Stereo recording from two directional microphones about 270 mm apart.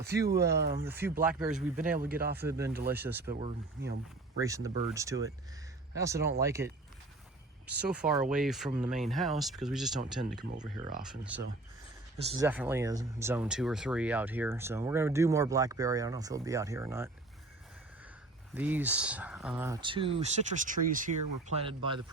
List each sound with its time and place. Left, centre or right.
0.5 s speech: right
0.9 s speech: centre
1.7 s speech: right
2.4 s speech: centre
2.6 s speech: right
2.9 s speech: centre
3.8 s speech: right
4.4 s speech: centre
7.8 s speech: centre
10.3 s speech: centre
18.5 s speech: centre